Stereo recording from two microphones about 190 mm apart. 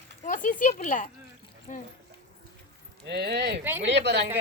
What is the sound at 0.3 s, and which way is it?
Speech, 40° left (ahead or behind).